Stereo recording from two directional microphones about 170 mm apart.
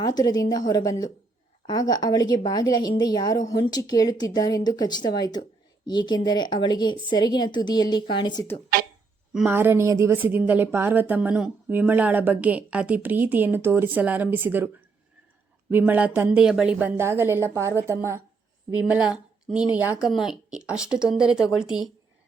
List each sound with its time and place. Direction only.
0.0 s speech: 25° left (ahead or behind)
9.3 s a woman's voice: 10° right (ahead or behind)
19.6 s speech: 25° left (ahead or behind)
19.9 s speech: 5° right (ahead or behind)